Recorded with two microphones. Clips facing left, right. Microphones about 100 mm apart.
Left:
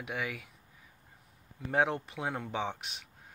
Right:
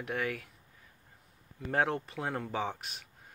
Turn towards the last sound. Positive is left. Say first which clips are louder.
# even
turn(degrees=0)  # may be behind; listen again after turning